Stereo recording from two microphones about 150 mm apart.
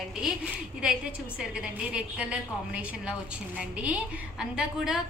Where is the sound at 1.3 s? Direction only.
5° right (ahead or behind).